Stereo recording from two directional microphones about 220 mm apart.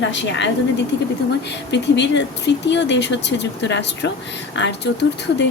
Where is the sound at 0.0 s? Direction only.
55° left (ahead or behind).